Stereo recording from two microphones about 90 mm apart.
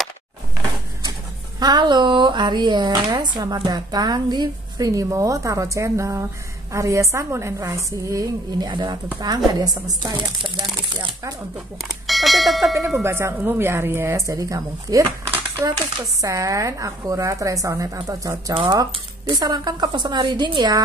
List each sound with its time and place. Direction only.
1.6 s a woman's voice: 50° right (ahead or behind)
8.6 s speech: 55° right (ahead or behind)
11.8 s speech: centre (ahead or behind)
13.0 s speech: 30° right (ahead or behind)
15.3 s crumpling: 30° right (ahead or behind)
16.2 s a woman's voice: 35° right (ahead or behind); by 20.8 s 55° right (ahead or behind)